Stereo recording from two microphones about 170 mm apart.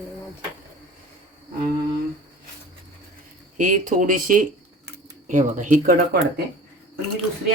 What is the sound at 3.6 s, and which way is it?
Speech, 50° right (ahead or behind).